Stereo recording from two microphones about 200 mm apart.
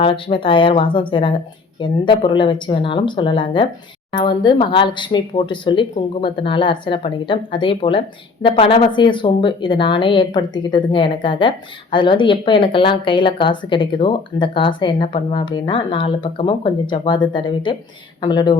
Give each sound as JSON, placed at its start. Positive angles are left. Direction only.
{"t": 0.0, "sound": "speech", "side_deg": 25}